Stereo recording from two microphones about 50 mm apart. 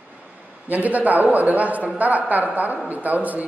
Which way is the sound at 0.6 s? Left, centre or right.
Right.